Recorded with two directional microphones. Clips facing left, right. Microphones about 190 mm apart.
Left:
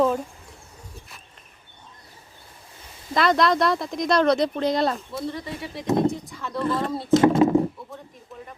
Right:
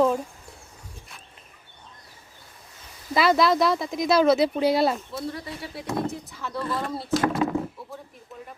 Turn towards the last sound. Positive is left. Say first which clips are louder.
# left 7 dB
turn(degrees=25)  # may be behind; listen again after turning